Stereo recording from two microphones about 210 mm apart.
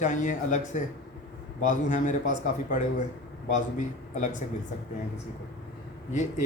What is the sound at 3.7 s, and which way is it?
Speech, 35° left (ahead or behind).